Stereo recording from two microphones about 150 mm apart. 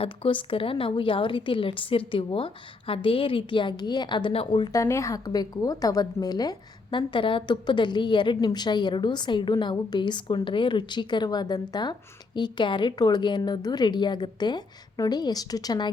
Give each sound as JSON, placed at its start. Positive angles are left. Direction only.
{"t": 0.0, "sound": "a woman's voice", "side_deg": 35}